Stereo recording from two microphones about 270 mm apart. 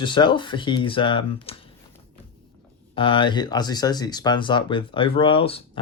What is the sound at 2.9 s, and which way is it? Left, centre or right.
Speech, centre.